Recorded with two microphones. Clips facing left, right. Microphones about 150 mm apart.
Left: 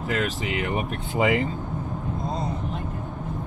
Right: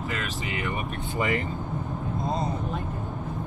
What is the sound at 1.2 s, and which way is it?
Speech, 90° left.